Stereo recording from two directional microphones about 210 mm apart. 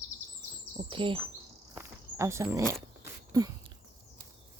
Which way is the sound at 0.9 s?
25° right (ahead or behind).